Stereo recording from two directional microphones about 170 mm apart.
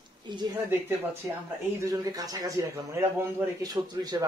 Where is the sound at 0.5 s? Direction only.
15° right (ahead or behind).